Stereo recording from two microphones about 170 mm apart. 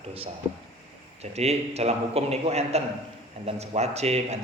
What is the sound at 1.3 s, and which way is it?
A man's voice, 40° right (ahead or behind).